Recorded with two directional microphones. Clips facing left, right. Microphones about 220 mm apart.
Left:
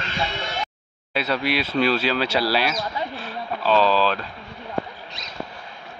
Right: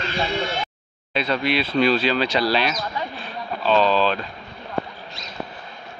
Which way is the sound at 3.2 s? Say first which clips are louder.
Right 1 dB; 5° left (ahead or behind).